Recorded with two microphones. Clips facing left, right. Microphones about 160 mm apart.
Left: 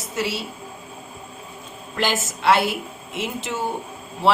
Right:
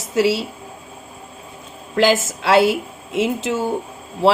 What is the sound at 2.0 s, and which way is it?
A woman's voice, 90° right.